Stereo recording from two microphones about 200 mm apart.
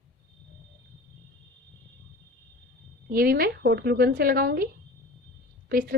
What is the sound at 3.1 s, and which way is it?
A woman's voice, 50° right (ahead or behind).